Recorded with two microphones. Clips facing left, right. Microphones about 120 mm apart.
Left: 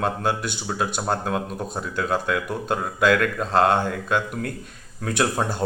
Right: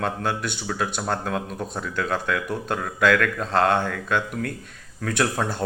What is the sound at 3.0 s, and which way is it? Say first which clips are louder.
Speech: even; 35° left (ahead or behind).